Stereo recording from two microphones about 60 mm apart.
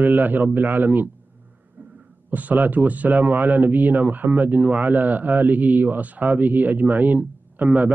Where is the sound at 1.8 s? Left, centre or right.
Right.